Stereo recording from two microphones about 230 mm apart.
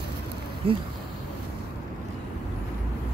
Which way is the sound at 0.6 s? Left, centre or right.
Right.